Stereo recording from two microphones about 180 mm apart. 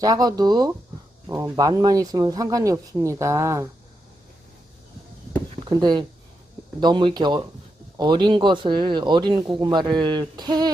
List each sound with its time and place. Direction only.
0.0 s speech: 20° right (ahead or behind)
5.6 s speech: 25° right (ahead or behind)